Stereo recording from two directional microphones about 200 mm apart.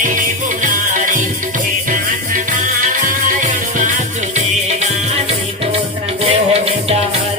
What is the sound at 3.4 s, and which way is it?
Music, 40° right (ahead or behind).